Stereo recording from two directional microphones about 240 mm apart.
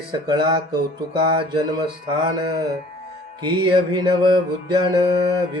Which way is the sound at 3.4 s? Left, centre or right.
Centre.